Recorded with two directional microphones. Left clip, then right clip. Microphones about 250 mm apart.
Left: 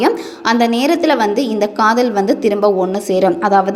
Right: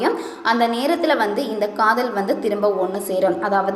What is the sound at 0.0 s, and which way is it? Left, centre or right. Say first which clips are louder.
A woman's voice: left 5 dB; left.